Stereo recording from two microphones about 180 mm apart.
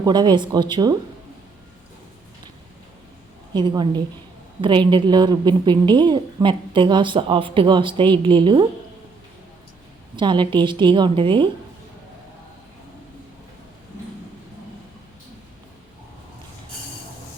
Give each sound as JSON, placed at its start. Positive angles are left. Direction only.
{"t": 0.0, "sound": "a woman's voice", "side_deg": -25}
{"t": 3.5, "sound": "a woman's voice", "side_deg": -25}
{"t": 10.2, "sound": "a woman's voice", "side_deg": -25}